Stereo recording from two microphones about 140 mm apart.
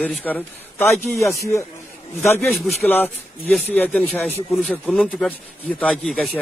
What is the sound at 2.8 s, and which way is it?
A man's voice, 15° left (ahead or behind).